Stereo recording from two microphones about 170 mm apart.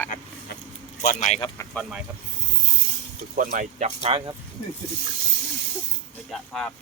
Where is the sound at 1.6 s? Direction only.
15° left (ahead or behind).